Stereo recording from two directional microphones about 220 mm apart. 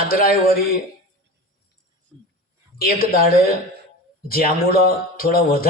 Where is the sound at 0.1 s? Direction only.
40° left (ahead or behind).